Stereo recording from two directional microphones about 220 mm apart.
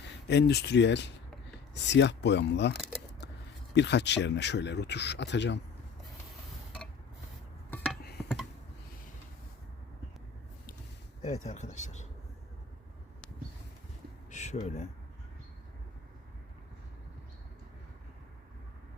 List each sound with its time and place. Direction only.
0.3 s speech: 50° left (ahead or behind)
3.8 s speech: 50° left (ahead or behind)
11.2 s speech: 30° left (ahead or behind)
14.3 s a sound: 30° left (ahead or behind)